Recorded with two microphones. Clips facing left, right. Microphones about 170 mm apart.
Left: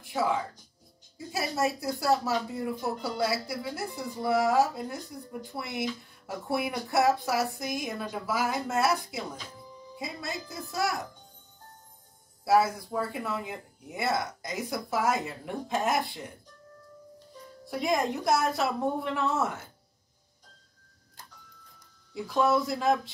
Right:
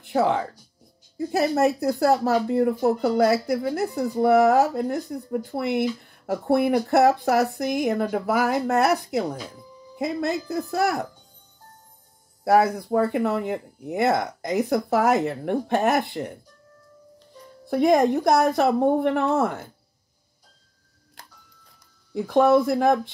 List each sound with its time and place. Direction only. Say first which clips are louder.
0.0 s speech: right 7 dB; 65° right (ahead or behind)
12.4 s speech: right 5 dB; 60° right (ahead or behind)
17.6 s speech: right 10 dB; 55° right (ahead or behind)
22.1 s speech: right 8 dB; 55° right (ahead or behind)